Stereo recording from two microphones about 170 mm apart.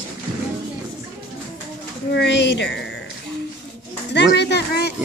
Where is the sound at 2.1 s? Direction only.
90° left.